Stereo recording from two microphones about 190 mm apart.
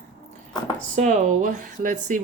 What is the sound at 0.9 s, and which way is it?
Speech, 40° right (ahead or behind).